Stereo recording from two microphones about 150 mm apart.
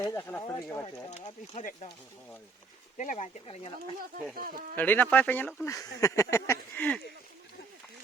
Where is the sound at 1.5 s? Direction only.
55° left (ahead or behind).